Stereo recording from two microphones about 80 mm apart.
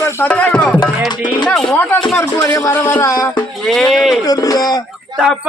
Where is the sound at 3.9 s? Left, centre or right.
Centre.